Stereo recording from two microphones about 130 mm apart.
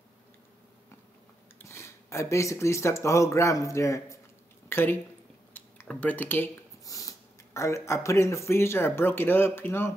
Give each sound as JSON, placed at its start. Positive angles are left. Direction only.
{"t": 1.6, "sound": "speech", "side_deg": 20}
{"t": 4.6, "sound": "a sound", "side_deg": 15}
{"t": 5.5, "sound": "speech", "side_deg": 10}
{"t": 6.8, "sound": "speech", "side_deg": 25}